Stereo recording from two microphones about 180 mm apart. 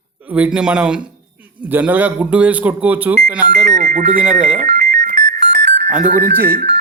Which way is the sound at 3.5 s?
40° right (ahead or behind).